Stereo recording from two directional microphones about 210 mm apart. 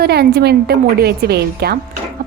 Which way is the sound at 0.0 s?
50° right (ahead or behind).